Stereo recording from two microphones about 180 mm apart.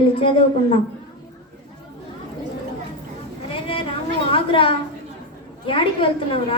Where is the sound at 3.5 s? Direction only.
30° left (ahead or behind).